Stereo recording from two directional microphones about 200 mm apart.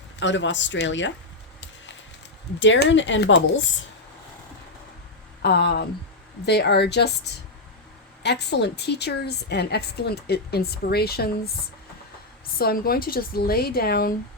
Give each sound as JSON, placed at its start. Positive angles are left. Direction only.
{"t": 0.2, "sound": "speech", "side_deg": 65}
{"t": 2.6, "sound": "speech", "side_deg": 60}
{"t": 5.4, "sound": "speech", "side_deg": 55}
{"t": 8.2, "sound": "a woman's voice", "side_deg": 55}
{"t": 12.5, "sound": "a woman's voice", "side_deg": 50}